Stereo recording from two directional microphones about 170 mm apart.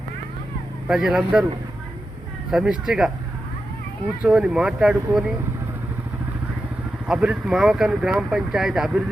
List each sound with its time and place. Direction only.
0.9 s speech: 5° right (ahead or behind)
2.5 s speech: 5° right (ahead or behind)
4.2 s speech: 5° right (ahead or behind)
7.1 s speech: 5° right (ahead or behind)